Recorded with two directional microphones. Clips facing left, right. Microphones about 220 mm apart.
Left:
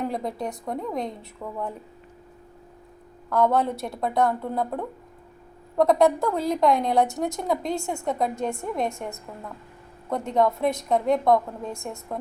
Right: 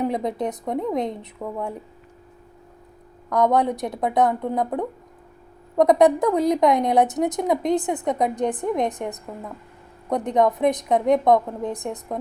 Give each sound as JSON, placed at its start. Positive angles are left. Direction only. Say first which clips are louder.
{"t": 0.0, "sound": "a woman's voice", "louder": "right 5 dB", "side_deg": -20}
{"t": 3.2, "sound": "a woman's voice", "louder": "right 2 dB", "side_deg": -15}
{"t": 5.7, "sound": "a woman's voice", "louder": "right 3 dB", "side_deg": -20}